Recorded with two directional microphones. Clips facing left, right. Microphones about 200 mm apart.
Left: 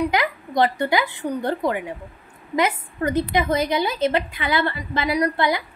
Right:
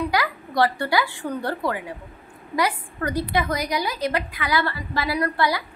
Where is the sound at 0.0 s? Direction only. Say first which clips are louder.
Left 2 dB; 20° left (ahead or behind).